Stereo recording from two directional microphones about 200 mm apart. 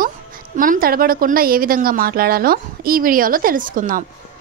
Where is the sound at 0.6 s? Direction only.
45° right (ahead or behind).